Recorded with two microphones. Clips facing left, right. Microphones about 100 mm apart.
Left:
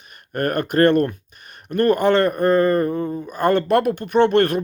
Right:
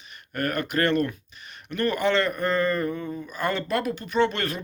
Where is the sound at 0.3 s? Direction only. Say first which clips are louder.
Left 7 dB; 50° left (ahead or behind).